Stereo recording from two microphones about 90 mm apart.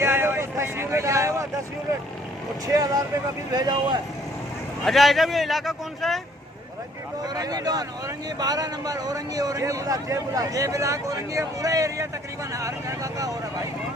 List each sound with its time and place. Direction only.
0.0 s vehicle: 25° right (ahead or behind)
2.6 s speech: 40° right (ahead or behind)
4.9 s speech: centre (ahead or behind)
7.3 s speech: 45° right (ahead or behind)